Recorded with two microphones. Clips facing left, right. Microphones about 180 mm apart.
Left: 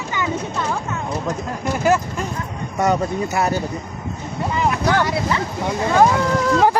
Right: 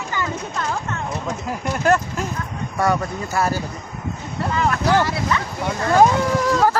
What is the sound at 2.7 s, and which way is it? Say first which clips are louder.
Speech: left 2 dB; 20° left (ahead or behind).